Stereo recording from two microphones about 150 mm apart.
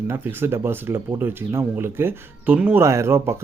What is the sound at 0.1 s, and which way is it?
Speech, 15° right (ahead or behind).